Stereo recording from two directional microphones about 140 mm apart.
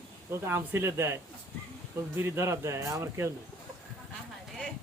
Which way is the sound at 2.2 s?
20° right (ahead or behind).